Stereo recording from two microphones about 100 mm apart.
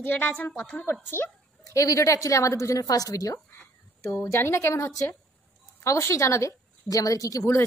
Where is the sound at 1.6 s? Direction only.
35° left (ahead or behind).